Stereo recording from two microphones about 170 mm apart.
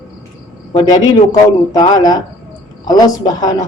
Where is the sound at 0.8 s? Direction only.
25° left (ahead or behind).